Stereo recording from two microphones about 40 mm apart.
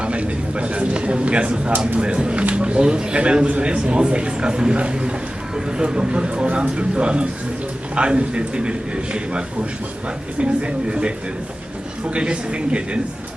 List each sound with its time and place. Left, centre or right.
0.0 s a man's voice: right
10.4 s a man's voice: right
12.1 s a man's voice: right